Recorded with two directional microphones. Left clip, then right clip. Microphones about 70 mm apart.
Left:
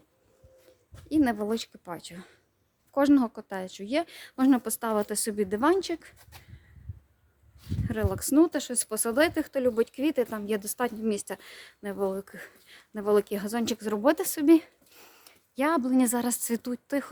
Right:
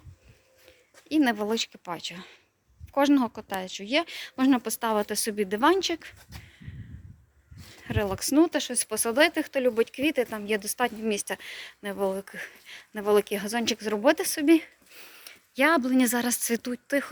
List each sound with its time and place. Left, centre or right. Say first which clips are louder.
1.0 s speech: right 1 dB; left
2.9 s speech: even; left
4.4 s speech: even; left
7.9 s speech: right 2 dB; left
8.8 s speech: right 2 dB; left
9.7 s speech: right 1 dB; left
10.3 s a woman's voice: right 2 dB; left
10.8 s speech: right 2 dB; left
12.5 s speech: right 6 dB; left
15.2 s a sound: right 4 dB; left
15.6 s speech: right 3 dB; centre
16.1 s speech: right 2 dB; left